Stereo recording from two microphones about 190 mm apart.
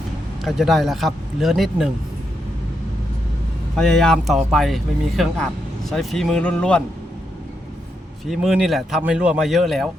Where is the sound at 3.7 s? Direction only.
5° left (ahead or behind).